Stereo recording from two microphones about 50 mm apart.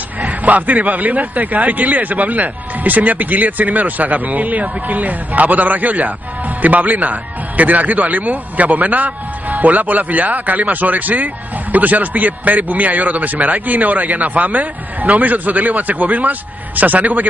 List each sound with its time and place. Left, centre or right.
0.2 s a man's voice: right